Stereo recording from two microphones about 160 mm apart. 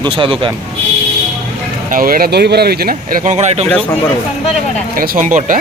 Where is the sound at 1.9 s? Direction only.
65° right (ahead or behind).